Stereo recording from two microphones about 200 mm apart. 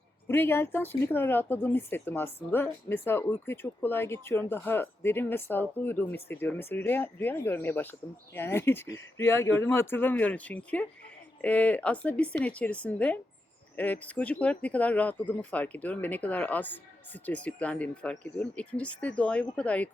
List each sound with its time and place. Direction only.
0.3 s speech: 10° left (ahead or behind)